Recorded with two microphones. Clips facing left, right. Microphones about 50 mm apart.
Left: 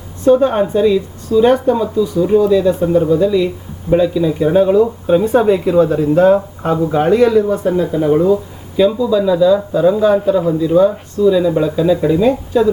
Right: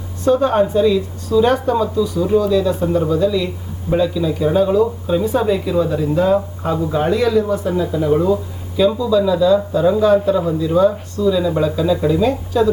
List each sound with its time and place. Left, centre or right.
0.3 s speech: left
1.7 s speech: centre
8.2 s speech: centre